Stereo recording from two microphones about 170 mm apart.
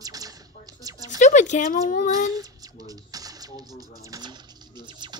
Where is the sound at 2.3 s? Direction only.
20° right (ahead or behind).